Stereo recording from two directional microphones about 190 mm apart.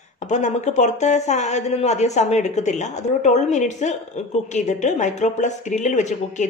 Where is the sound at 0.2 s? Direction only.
40° left (ahead or behind).